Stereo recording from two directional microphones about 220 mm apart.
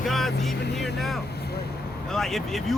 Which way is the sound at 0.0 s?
Centre (ahead or behind).